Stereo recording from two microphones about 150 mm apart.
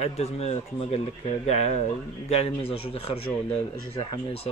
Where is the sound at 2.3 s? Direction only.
40° left (ahead or behind).